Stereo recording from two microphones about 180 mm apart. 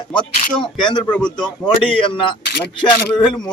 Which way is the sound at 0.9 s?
25° left (ahead or behind).